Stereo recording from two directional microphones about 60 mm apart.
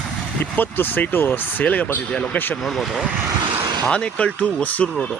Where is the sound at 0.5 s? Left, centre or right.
Left.